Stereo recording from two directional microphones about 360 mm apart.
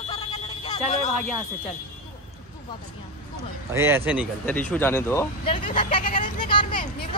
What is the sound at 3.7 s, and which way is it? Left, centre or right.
Speech, centre.